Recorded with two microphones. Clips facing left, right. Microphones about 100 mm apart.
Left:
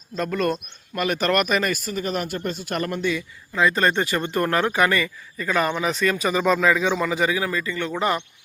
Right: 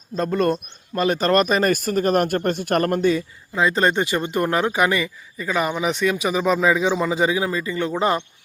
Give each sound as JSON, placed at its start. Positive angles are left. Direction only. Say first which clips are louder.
{"t": 0.2, "sound": "speech", "louder": "right 3 dB", "side_deg": -30}
{"t": 1.7, "sound": "speech", "louder": "right 7 dB", "side_deg": -50}
{"t": 3.5, "sound": "speech", "louder": "right 1 dB", "side_deg": -25}